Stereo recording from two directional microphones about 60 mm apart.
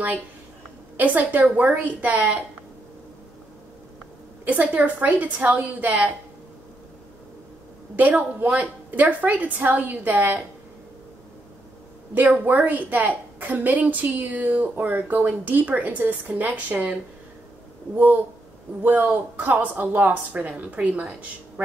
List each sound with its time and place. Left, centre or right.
0.9 s a woman's voice: right
4.5 s a woman's voice: right
7.9 s a woman's voice: right
12.4 s a woman's voice: right
17.9 s a woman's voice: right